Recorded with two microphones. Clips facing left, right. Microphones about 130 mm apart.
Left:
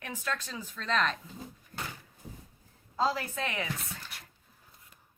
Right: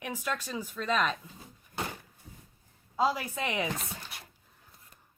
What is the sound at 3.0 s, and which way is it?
Speech, 15° right (ahead or behind).